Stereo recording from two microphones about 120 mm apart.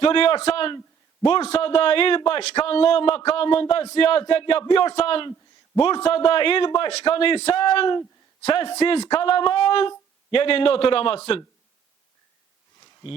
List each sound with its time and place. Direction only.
0.0 s a man's voice: 50° left (ahead or behind)